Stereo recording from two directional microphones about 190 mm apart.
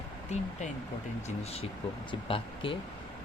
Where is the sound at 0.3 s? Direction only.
35° left (ahead or behind).